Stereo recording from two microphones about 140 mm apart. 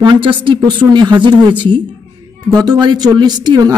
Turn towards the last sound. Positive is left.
turn(degrees=-30)  # may be behind; listen again after turning